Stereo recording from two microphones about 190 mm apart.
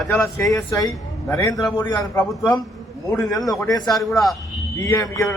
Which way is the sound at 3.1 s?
15° left (ahead or behind).